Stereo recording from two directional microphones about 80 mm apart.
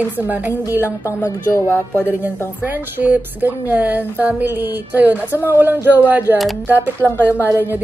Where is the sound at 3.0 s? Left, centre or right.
Right.